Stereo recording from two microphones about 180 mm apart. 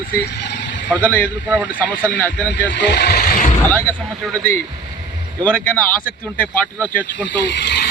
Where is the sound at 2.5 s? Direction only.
70° left (ahead or behind); by 3.5 s 50° left (ahead or behind).